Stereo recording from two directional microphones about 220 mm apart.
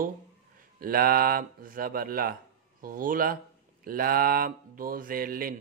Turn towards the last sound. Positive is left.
turn(degrees=-40)  # may be behind; listen again after turning